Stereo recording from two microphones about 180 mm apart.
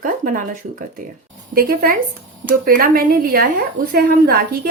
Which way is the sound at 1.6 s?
55° right (ahead or behind).